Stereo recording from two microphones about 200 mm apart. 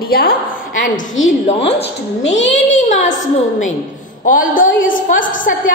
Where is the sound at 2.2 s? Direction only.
65° left (ahead or behind).